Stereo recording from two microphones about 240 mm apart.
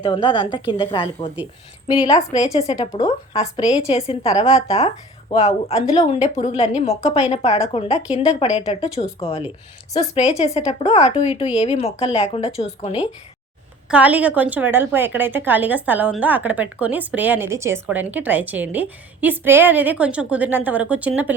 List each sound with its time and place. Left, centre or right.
0.0 s speech: left
13.8 s a woman's voice: centre